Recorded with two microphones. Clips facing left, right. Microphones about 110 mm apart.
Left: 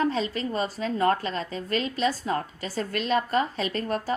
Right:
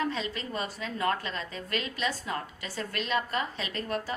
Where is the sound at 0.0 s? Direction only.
35° left (ahead or behind).